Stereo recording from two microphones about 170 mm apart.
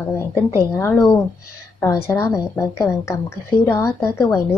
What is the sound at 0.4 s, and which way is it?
A woman's voice, 15° left (ahead or behind).